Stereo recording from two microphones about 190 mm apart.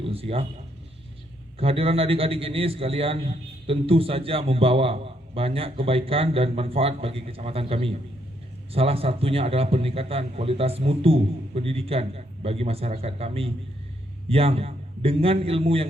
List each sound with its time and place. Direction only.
0.0 s speech: 30° right (ahead or behind)
1.5 s a man's voice: 30° right (ahead or behind)